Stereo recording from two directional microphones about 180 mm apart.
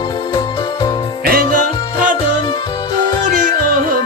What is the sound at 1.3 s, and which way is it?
Music, 55° right (ahead or behind).